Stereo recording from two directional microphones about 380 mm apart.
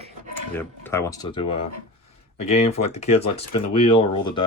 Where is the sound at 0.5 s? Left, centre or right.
Centre.